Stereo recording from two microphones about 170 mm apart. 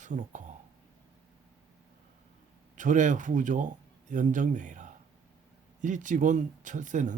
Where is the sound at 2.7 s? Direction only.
50° right (ahead or behind).